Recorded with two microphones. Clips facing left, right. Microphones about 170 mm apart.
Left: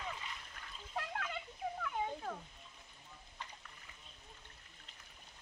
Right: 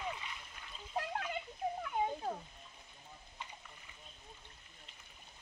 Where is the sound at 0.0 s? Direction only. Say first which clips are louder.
Right 3 dB; 5° right (ahead or behind).